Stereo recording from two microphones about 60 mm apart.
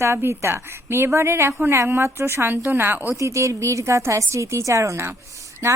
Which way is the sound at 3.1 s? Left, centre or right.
Right.